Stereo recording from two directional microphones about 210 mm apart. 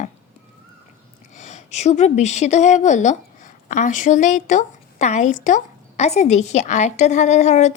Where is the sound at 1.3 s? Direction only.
35° left (ahead or behind).